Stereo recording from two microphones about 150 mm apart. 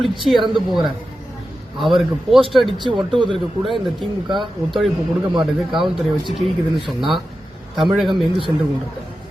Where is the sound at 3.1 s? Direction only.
35° right (ahead or behind).